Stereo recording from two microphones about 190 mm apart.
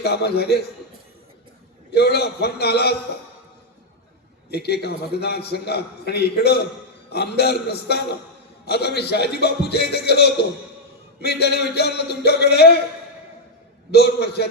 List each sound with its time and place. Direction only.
0.0 s a man's voice: 60° left (ahead or behind)
1.9 s a man's voice: 60° left (ahead or behind)
4.5 s a man's voice: 60° left (ahead or behind)
13.9 s a man's voice: 60° left (ahead or behind)